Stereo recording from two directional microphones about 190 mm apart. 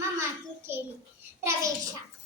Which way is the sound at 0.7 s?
10° right (ahead or behind).